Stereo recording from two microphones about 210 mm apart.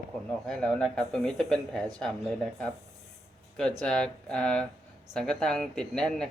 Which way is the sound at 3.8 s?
5° left (ahead or behind).